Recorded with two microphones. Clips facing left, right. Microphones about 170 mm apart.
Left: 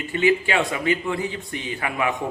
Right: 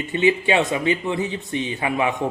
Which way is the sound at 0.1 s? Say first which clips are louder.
Right 1 dB; 20° right (ahead or behind).